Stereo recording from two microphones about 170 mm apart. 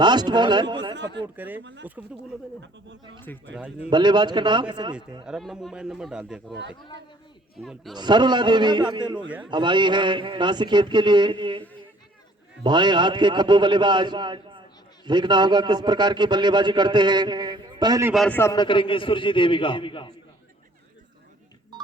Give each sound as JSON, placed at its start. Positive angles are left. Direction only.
{"t": 0.0, "sound": "a man's voice", "side_deg": -25}
{"t": 0.9, "sound": "speech", "side_deg": -90}
{"t": 1.4, "sound": "a man's voice", "side_deg": -10}
{"t": 3.2, "sound": "speech", "side_deg": 10}
{"t": 3.8, "sound": "a man's voice", "side_deg": -25}
{"t": 5.2, "sound": "speech", "side_deg": 0}
{"t": 7.6, "sound": "speech", "side_deg": 0}
{"t": 7.9, "sound": "a man's voice", "side_deg": -25}
{"t": 9.1, "sound": "a man's voice", "side_deg": -10}
{"t": 9.5, "sound": "a man's voice", "side_deg": -25}
{"t": 12.6, "sound": "a man's voice", "side_deg": -25}
{"t": 18.3, "sound": "speech", "side_deg": 15}
{"t": 18.5, "sound": "a man's voice", "side_deg": 25}